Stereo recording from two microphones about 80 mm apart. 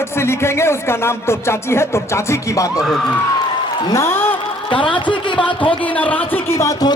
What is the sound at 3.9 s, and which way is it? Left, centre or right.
Speech, left.